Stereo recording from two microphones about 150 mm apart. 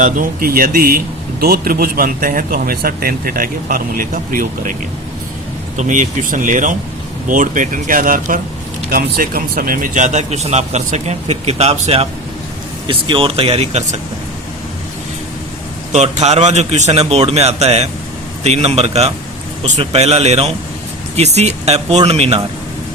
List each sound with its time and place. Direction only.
0.0 s speech: 65° right (ahead or behind)
8.9 s speech: 90° right; by 13.8 s 45° right (ahead or behind)
15.9 s speech: 50° right (ahead or behind)